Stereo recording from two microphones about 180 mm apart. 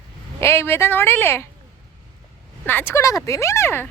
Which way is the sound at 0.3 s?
15° left (ahead or behind).